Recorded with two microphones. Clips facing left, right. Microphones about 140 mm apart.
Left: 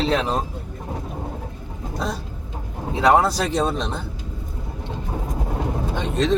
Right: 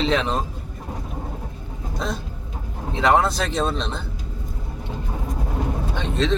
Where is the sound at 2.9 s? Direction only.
10° left (ahead or behind).